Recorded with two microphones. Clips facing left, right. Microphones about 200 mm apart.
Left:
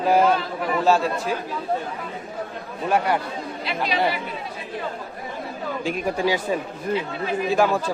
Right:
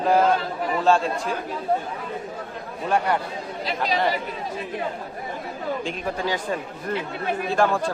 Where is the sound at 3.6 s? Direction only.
40° right (ahead or behind).